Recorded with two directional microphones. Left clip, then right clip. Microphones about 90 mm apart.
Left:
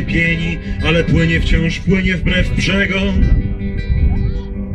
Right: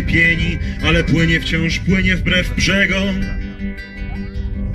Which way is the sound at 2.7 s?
10° right (ahead or behind).